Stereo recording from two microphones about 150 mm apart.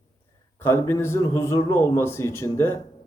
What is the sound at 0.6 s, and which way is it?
A man's voice, 15° left (ahead or behind).